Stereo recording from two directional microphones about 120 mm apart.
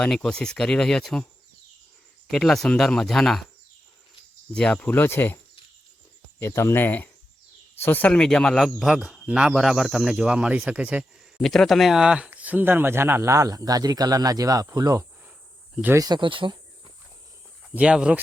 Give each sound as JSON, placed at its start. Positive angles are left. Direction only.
{"t": 0.0, "sound": "speech", "side_deg": 5}
{"t": 2.3, "sound": "speech", "side_deg": 5}
{"t": 4.5, "sound": "speech", "side_deg": 10}
{"t": 6.4, "sound": "speech", "side_deg": 20}
{"t": 11.3, "sound": "speech", "side_deg": 0}
{"t": 17.7, "sound": "speech", "side_deg": -10}